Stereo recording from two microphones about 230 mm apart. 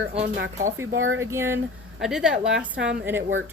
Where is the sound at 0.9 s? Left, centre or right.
Right.